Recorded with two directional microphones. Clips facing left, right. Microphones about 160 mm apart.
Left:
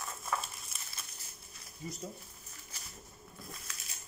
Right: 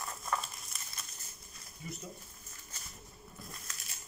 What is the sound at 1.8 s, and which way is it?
Speech, 35° left (ahead or behind).